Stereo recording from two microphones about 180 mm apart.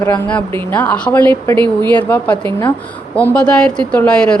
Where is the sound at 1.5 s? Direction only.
25° right (ahead or behind).